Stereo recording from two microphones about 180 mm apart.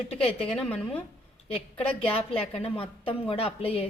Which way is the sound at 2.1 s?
30° left (ahead or behind).